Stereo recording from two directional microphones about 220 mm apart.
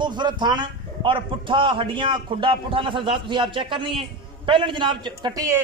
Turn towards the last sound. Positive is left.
turn(degrees=-15)  # may be behind; listen again after turning